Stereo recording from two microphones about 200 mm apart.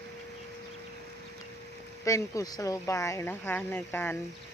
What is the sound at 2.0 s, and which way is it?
Speech, 15° left (ahead or behind).